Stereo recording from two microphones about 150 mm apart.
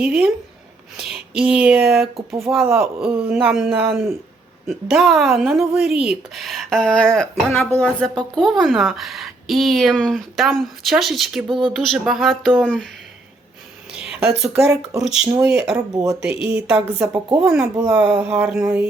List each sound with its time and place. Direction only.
0.0 s speech: 10° right (ahead or behind)
13.9 s a sound: 5° right (ahead or behind)
14.5 s speech: 20° right (ahead or behind)
14.9 s speech: 5° right (ahead or behind)